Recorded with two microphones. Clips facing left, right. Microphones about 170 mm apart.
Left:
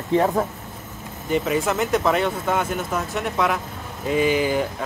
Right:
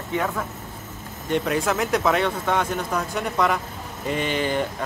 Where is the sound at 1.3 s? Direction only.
Centre (ahead or behind).